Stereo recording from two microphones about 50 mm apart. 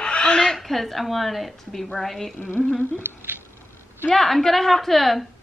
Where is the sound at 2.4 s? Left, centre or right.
Left.